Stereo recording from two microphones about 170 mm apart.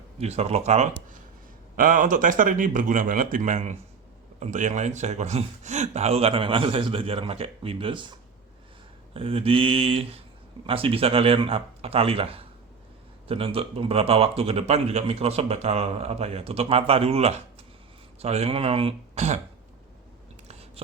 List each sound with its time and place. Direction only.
0.2 s speech: 40° right (ahead or behind)
1.7 s speech: 50° right (ahead or behind)
20.5 s chewing: 35° right (ahead or behind)